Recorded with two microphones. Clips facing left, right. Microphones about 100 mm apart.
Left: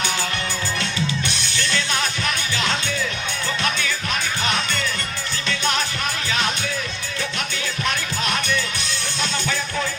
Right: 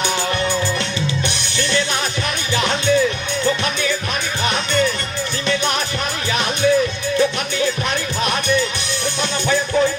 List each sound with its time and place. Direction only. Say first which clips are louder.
1.3 s music: right 4 dB; 20° right (ahead or behind)